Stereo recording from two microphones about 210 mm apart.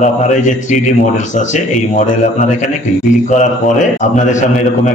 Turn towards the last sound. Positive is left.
turn(degrees=35)  # may be behind; listen again after turning